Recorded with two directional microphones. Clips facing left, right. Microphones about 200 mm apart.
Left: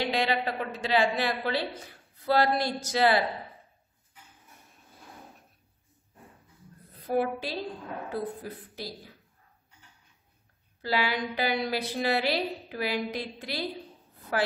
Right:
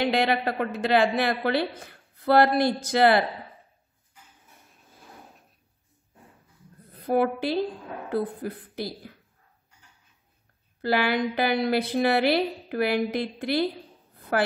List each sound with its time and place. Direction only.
0.0 s a woman's voice: 55° right (ahead or behind)
7.1 s a woman's voice: 55° right (ahead or behind)
10.8 s a woman's voice: 55° right (ahead or behind)